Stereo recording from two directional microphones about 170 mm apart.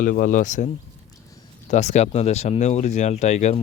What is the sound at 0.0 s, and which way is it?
Speech, 55° left (ahead or behind).